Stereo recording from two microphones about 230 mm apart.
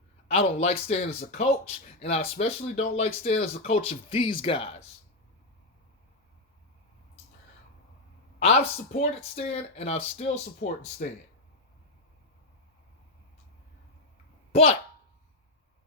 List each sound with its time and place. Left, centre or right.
0.3 s speech: left
8.4 s speech: left